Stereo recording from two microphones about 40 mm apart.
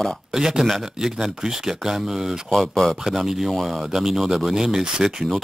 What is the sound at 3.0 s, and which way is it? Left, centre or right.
Speech, centre.